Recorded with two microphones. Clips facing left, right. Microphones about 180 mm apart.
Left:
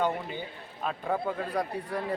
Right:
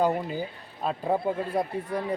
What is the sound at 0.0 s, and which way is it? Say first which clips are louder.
A man's voice: right 4 dB; 35° right (ahead or behind).